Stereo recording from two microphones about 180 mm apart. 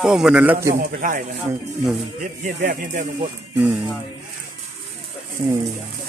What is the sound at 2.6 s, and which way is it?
Speech, 60° right (ahead or behind).